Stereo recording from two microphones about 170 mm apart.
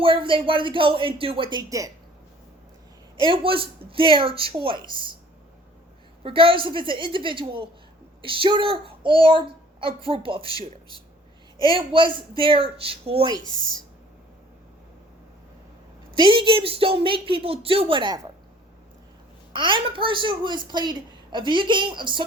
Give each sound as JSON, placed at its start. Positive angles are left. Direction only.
{"t": 0.0, "sound": "a woman's voice", "side_deg": -30}
{"t": 3.2, "sound": "a woman's voice", "side_deg": -30}
{"t": 6.2, "sound": "a woman's voice", "side_deg": -30}
{"t": 10.4, "sound": "speech", "side_deg": 25}
{"t": 11.9, "sound": "a woman's voice", "side_deg": -30}
{"t": 16.1, "sound": "a woman's voice", "side_deg": -30}
{"t": 19.5, "sound": "a woman's voice", "side_deg": -30}